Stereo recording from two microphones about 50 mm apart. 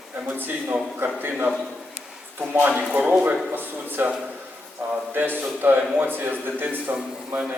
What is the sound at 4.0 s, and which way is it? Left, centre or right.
A man's voice, right.